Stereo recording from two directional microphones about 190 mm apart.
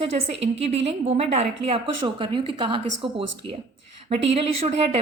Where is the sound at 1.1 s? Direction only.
35° right (ahead or behind).